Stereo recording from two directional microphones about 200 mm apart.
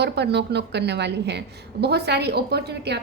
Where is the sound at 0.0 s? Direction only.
55° right (ahead or behind).